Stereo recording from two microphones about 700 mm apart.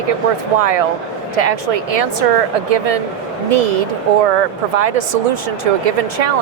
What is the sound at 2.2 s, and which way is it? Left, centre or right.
Speech, right.